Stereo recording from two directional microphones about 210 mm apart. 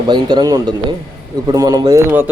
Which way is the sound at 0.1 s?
20° right (ahead or behind).